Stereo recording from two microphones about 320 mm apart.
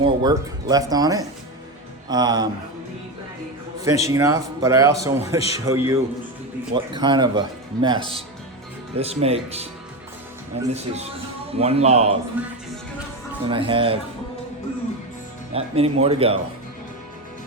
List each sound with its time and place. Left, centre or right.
0.0 s a man's voice: centre
3.8 s a man's voice: centre
12.4 s speech: centre
13.5 s a man's voice: centre
15.5 s a man's voice: centre